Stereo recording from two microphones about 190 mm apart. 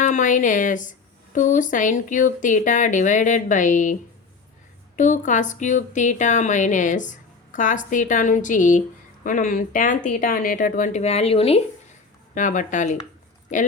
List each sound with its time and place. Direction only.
0.0 s a woman's voice: 40° left (ahead or behind)
4.9 s a woman's voice: 40° left (ahead or behind)
12.3 s a woman's voice: 40° left (ahead or behind)